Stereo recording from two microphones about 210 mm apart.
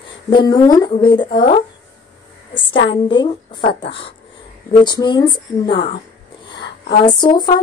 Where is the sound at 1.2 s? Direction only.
40° left (ahead or behind).